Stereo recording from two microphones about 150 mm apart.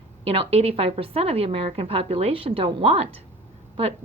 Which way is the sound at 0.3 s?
40° right (ahead or behind).